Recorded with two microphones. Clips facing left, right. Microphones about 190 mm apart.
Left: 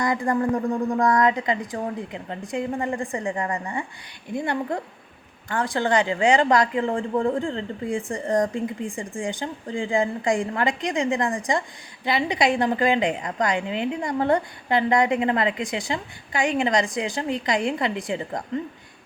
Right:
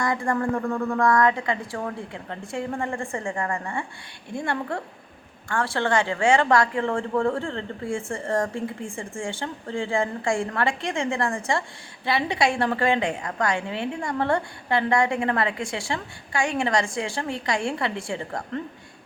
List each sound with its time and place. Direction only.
0.0 s a woman's voice: 20° left (ahead or behind)